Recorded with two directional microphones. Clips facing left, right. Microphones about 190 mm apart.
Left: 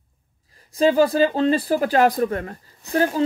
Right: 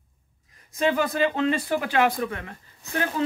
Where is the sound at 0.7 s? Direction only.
35° left (ahead or behind).